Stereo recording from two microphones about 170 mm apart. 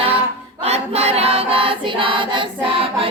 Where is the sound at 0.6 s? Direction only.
35° right (ahead or behind).